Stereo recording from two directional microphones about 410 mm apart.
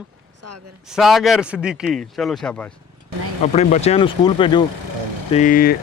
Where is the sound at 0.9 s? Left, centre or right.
Centre.